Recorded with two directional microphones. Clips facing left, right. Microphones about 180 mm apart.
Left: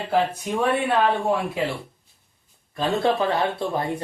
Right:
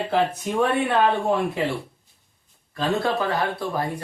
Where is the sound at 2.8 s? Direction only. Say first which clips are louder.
Left 2 dB; 25° left (ahead or behind).